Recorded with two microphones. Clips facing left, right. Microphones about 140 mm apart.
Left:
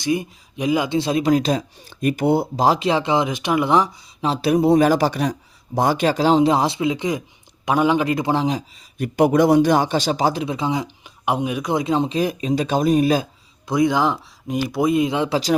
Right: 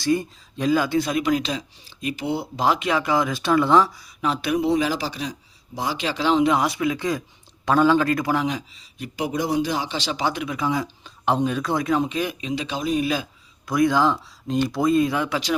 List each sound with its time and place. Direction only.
0.0 s speech: 15° left (ahead or behind)
4.2 s speech: 35° left (ahead or behind)
9.0 s speech: 55° left (ahead or behind); by 13.2 s 40° left (ahead or behind)
13.7 s speech: 20° left (ahead or behind)